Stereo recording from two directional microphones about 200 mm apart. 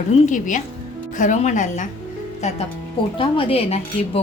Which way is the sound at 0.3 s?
40° left (ahead or behind).